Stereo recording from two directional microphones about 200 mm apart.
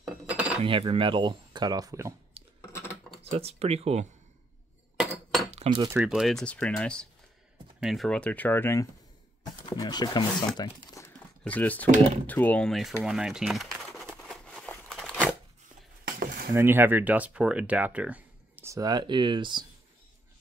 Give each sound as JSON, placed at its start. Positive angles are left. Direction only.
{"t": 0.0, "sound": "cutlery", "side_deg": -5}
{"t": 0.7, "sound": "speech", "side_deg": -25}
{"t": 2.4, "sound": "a sound", "side_deg": -30}
{"t": 3.3, "sound": "speech", "side_deg": -30}
{"t": 5.5, "sound": "cutlery", "side_deg": -30}
{"t": 5.9, "sound": "speech", "side_deg": -5}
{"t": 11.0, "sound": "crumpling", "side_deg": 15}
{"t": 11.4, "sound": "speech", "side_deg": 10}
{"t": 12.3, "sound": "bird", "side_deg": 10}
{"t": 15.0, "sound": "a sound", "side_deg": 5}
{"t": 16.1, "sound": "a sound", "side_deg": -45}
{"t": 16.5, "sound": "speech", "side_deg": -10}